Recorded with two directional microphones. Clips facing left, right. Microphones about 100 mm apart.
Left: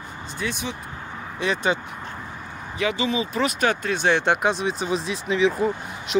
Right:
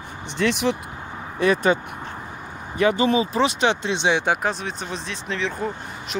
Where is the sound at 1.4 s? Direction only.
50° right (ahead or behind).